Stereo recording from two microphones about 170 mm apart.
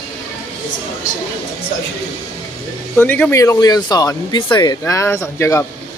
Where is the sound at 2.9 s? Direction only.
10° left (ahead or behind).